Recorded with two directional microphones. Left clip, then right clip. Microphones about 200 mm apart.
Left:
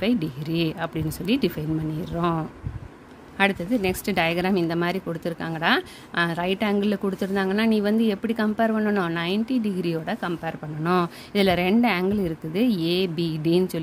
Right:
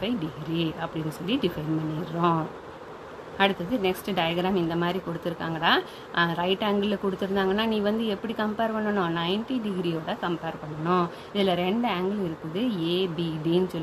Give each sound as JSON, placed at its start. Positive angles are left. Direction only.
{"t": 0.0, "sound": "speech", "side_deg": 55}